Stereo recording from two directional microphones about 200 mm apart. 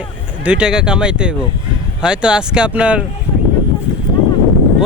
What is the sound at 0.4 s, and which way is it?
Speech, 5° right (ahead or behind).